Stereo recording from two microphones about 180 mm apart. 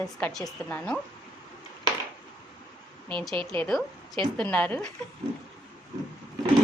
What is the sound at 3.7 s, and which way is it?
A woman's voice, centre (ahead or behind).